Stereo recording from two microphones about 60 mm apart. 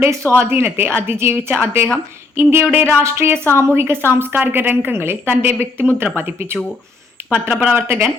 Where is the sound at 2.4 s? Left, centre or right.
Right.